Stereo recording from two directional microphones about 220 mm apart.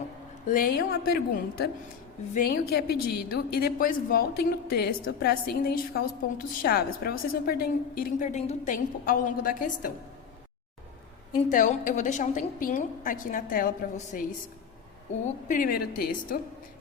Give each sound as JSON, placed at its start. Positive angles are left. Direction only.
{"t": 0.4, "sound": "a woman's voice", "side_deg": 40}
{"t": 11.4, "sound": "a woman's voice", "side_deg": 35}
{"t": 15.4, "sound": "a woman's voice", "side_deg": 40}